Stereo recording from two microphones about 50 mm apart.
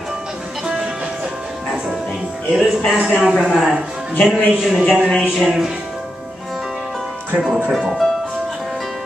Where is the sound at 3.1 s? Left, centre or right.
Centre.